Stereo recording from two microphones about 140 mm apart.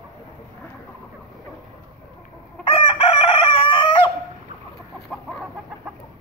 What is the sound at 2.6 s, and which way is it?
Chicken, 40° left (ahead or behind).